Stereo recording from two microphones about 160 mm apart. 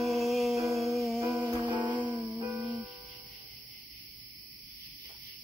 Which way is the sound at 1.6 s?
30° right (ahead or behind).